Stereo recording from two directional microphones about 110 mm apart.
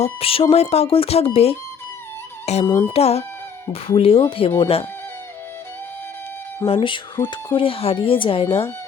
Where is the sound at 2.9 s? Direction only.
70° left (ahead or behind).